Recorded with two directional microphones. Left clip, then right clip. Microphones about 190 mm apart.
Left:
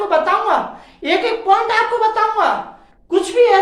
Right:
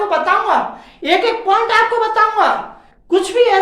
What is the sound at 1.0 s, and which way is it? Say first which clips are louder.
A woman's voice: right 1 dB; 15° right (ahead or behind).